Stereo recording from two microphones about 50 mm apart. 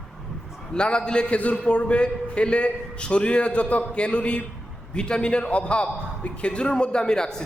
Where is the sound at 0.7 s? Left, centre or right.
Centre.